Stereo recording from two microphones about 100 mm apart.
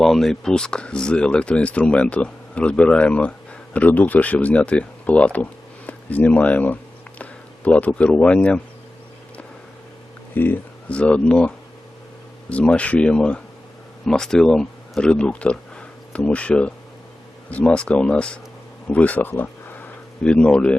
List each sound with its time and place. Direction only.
0.0 s speech: 5° left (ahead or behind)
10.3 s speech: 20° left (ahead or behind)
20.2 s speech: 10° left (ahead or behind)